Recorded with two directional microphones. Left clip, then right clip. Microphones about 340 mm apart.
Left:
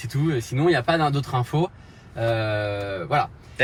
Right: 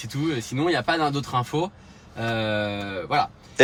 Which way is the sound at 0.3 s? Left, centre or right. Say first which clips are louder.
Left 3 dB; centre.